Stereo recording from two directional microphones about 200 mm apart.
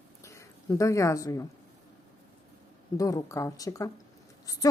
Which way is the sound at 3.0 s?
15° left (ahead or behind).